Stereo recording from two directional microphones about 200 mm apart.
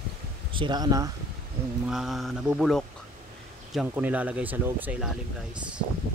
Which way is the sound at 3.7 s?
10° right (ahead or behind).